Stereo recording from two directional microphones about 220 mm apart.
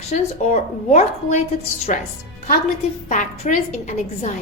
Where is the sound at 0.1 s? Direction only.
30° left (ahead or behind).